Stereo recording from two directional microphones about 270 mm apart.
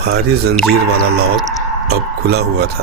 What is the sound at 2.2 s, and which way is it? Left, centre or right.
Speech, right.